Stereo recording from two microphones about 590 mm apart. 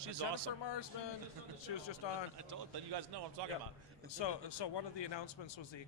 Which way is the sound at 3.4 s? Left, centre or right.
Right.